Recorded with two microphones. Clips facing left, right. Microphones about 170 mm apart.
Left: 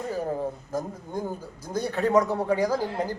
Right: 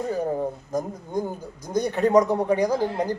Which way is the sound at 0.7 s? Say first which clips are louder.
Right 4 dB; 15° right (ahead or behind).